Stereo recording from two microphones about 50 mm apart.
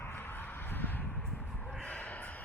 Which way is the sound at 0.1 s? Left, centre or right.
Left.